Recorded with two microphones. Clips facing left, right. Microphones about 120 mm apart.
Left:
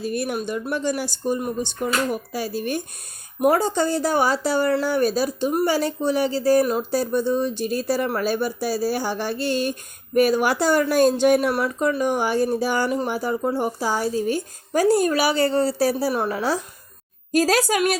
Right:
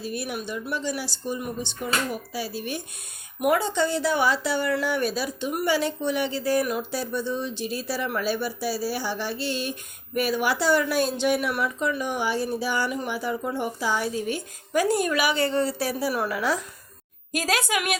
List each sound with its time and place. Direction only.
0.0 s speech: 50° left (ahead or behind)